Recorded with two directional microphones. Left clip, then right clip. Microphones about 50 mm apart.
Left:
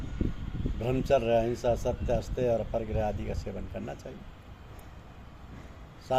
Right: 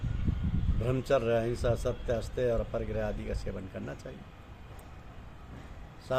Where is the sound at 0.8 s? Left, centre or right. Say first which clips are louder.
Left 2 dB; right.